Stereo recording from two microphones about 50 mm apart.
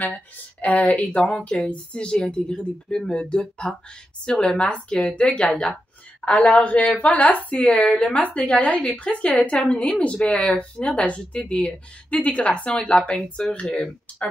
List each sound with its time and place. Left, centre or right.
0.0 s speech: left; by 13.6 s centre